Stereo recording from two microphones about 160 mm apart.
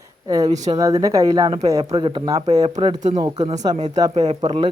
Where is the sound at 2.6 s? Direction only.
35° right (ahead or behind).